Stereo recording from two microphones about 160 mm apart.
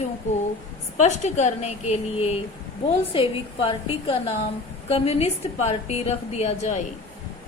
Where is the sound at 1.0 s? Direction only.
45° left (ahead or behind).